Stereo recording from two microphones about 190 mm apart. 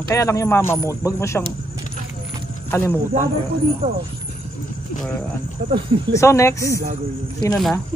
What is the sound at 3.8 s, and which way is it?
Speech, 30° right (ahead or behind).